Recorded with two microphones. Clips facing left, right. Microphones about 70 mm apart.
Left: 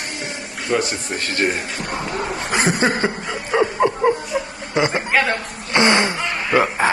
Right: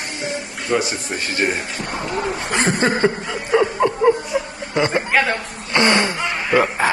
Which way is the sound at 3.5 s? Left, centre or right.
Centre.